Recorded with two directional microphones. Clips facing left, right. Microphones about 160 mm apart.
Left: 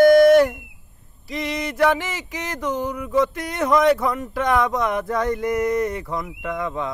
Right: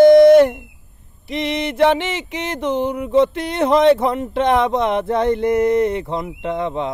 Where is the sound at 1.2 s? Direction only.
25° right (ahead or behind).